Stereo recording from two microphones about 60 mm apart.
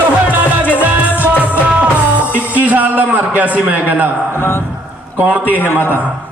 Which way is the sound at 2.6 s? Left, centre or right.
Right.